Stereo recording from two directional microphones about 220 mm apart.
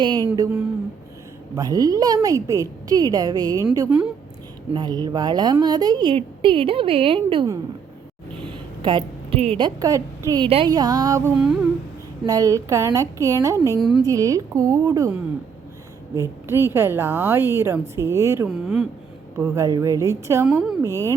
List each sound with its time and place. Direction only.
0.3 s a woman's voice: 15° right (ahead or behind)
3.8 s a woman's voice: 5° right (ahead or behind)
4.7 s a woman's voice: 20° right (ahead or behind)
8.8 s a woman's voice: 20° right (ahead or behind)
12.2 s a woman's voice: 15° right (ahead or behind)
13.7 s speech: centre (ahead or behind)
14.0 s a woman's voice: 15° right (ahead or behind)
18.4 s speech: 5° right (ahead or behind)
19.4 s a woman's voice: 15° right (ahead or behind)